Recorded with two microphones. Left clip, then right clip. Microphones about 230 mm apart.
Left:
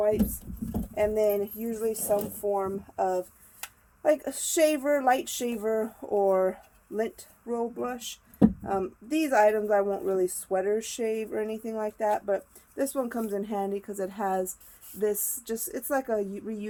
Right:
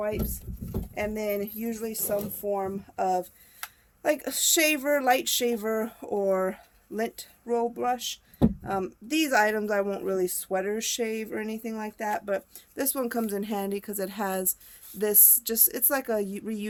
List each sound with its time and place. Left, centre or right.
0.9 s speech: right